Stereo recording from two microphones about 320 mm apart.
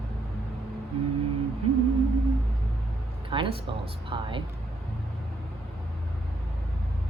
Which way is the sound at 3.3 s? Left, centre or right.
Centre.